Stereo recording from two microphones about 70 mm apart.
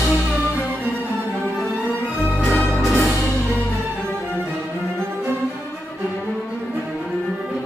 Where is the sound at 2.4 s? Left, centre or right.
Left.